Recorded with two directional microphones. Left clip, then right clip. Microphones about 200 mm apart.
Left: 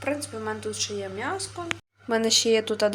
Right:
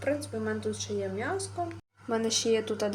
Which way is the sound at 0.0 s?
5° right (ahead or behind).